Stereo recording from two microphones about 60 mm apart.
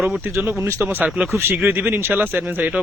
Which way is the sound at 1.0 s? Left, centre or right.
Centre.